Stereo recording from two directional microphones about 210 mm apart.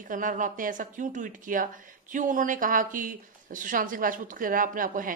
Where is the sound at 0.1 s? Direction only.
40° right (ahead or behind).